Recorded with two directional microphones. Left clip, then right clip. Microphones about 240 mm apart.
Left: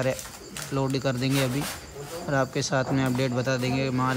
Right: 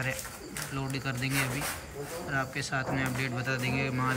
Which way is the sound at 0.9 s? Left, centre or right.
Centre.